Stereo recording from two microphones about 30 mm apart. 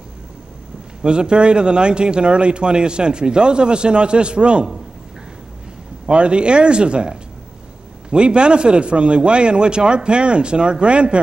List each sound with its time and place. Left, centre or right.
1.0 s speech: right
6.0 s speech: right